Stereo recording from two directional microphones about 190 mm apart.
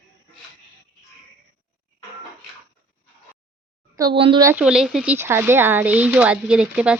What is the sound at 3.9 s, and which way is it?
Speech, 25° right (ahead or behind).